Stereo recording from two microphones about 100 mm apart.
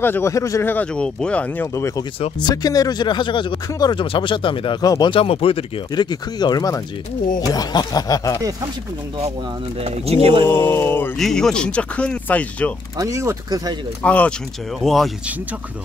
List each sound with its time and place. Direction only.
0.0 s speech: 20° left (ahead or behind)
0.3 s speech: 30° left (ahead or behind)
0.7 s speech: 15° left (ahead or behind)
2.4 s speech: 40° left (ahead or behind); by 4.7 s 55° left (ahead or behind)
4.8 s speech: 40° left (ahead or behind)
5.1 s speech: 65° left (ahead or behind)
5.9 s speech: 45° left (ahead or behind)
10.4 s speech: 25° left (ahead or behind)
11.1 s speech: 5° left (ahead or behind)
12.9 s speech: 30° right (ahead or behind)
14.0 s speech: 15° left (ahead or behind)
14.8 s speech: centre (ahead or behind)